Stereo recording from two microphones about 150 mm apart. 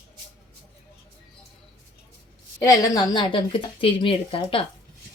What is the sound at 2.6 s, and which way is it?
A woman's voice, 25° left (ahead or behind).